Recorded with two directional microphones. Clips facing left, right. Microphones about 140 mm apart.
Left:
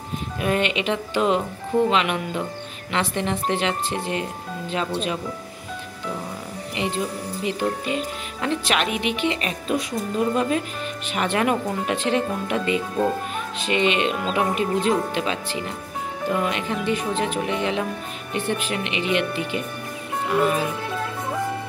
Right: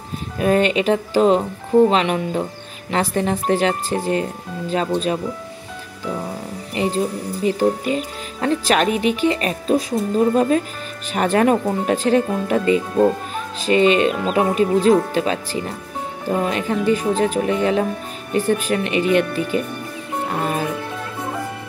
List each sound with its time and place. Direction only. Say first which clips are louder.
0.4 s speech: right 6 dB; 40° right (ahead or behind)
6.7 s speech: right 6 dB; 40° right (ahead or behind)